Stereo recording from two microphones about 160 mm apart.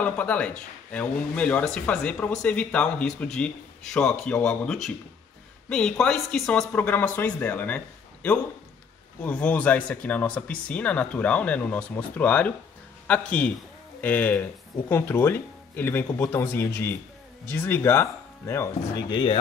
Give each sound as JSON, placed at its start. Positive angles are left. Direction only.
{"t": 0.0, "sound": "a man's voice", "side_deg": 10}